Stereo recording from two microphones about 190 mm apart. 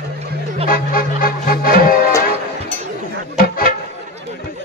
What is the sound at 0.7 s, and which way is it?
Music, 50° left (ahead or behind).